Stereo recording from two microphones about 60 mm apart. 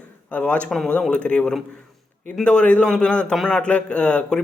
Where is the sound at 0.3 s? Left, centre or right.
Left.